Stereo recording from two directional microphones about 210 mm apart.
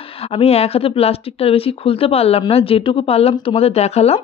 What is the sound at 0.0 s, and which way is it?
Speech, 25° left (ahead or behind).